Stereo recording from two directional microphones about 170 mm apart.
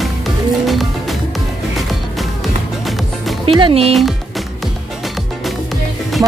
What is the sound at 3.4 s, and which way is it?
Music, 30° right (ahead or behind).